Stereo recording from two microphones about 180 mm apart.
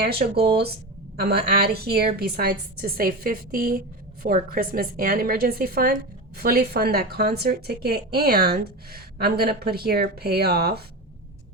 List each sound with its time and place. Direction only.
0.0 s speech: 65° right (ahead or behind)